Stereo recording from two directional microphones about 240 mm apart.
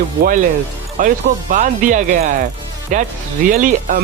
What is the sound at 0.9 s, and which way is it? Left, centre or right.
Speech, right.